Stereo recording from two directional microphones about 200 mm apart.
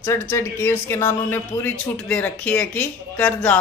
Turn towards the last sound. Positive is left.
turn(degrees=10)  # may be behind; listen again after turning